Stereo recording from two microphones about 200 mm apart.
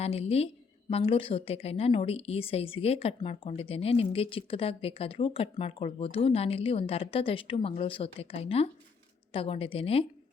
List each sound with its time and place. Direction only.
0.0 s a woman's voice: 30° left (ahead or behind)